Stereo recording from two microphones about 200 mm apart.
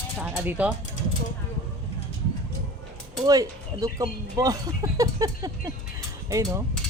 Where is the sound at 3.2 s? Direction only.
20° right (ahead or behind).